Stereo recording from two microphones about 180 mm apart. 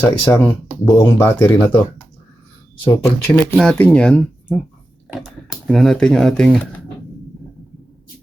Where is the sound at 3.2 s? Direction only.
5° left (ahead or behind).